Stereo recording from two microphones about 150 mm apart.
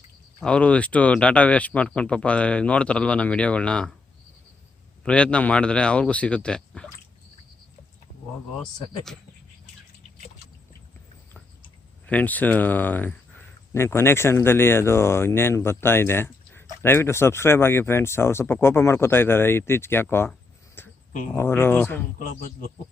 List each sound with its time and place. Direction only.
0.3 s speech: 10° left (ahead or behind)
5.0 s speech: 5° left (ahead or behind)
12.0 s speech: 10° left (ahead or behind)
20.8 s a sound: 15° left (ahead or behind)
21.3 s speech: 15° left (ahead or behind)